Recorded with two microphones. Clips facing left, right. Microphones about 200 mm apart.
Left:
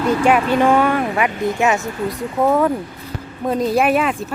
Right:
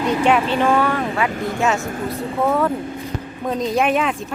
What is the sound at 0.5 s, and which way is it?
Speech, 15° left (ahead or behind).